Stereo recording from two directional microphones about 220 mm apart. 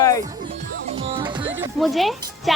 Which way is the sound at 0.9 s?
25° right (ahead or behind).